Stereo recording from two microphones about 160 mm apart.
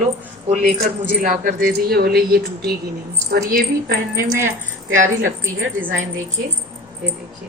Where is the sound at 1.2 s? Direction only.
60° right (ahead or behind).